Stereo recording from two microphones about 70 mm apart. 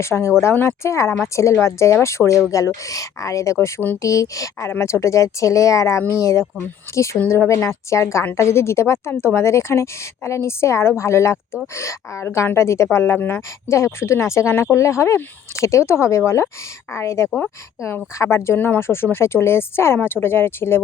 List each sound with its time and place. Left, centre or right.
0.0 s a woman's voice: left
4.7 s a woman's voice: left
13.1 s a woman's voice: left
13.7 s a woman's voice: left
17.2 s speech: centre
18.2 s a woman's voice: left